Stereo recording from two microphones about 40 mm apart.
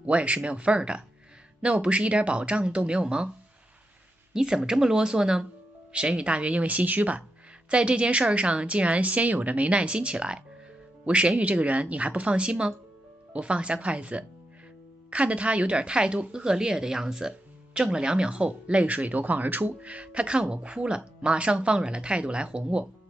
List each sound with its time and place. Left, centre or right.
0.0 s speech: right
4.3 s speech: centre; by 7.2 s right
7.7 s speech: right
19.8 s speech: right